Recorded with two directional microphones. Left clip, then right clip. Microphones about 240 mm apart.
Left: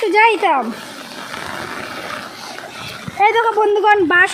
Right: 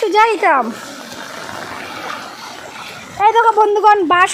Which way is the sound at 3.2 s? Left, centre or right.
Centre.